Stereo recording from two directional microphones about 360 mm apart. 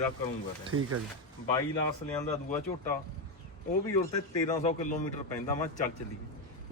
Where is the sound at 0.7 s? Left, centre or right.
Right.